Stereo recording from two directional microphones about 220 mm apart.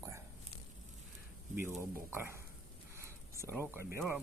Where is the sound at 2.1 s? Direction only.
10° right (ahead or behind).